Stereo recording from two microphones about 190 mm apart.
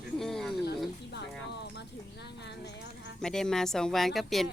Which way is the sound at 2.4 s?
60° left (ahead or behind).